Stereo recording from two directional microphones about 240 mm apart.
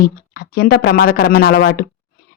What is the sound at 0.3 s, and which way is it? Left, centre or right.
Speech, left.